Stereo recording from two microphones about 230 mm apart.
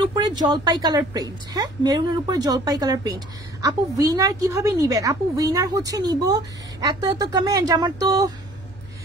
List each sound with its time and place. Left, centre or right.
0.1 s a woman's voice: centre